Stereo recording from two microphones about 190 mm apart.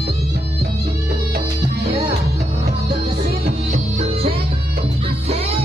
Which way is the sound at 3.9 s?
35° right (ahead or behind).